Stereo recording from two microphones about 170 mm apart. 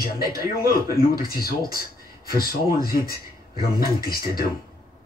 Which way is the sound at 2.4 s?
60° left (ahead or behind).